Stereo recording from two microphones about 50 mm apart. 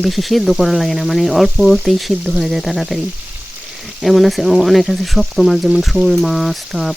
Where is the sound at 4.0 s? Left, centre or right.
Centre.